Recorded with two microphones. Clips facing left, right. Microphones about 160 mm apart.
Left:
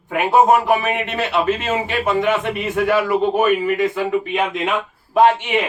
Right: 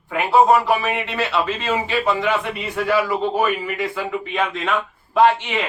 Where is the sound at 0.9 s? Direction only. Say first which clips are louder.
Left 1 dB; 50° left (ahead or behind).